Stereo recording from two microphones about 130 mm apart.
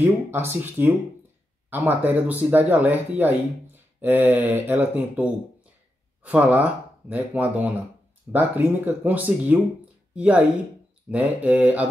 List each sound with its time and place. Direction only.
0.0 s speech: 15° right (ahead or behind)